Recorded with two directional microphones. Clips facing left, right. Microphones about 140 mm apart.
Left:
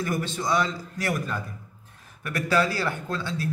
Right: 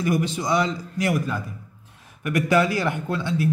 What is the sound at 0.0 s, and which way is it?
A man's voice, 15° right (ahead or behind).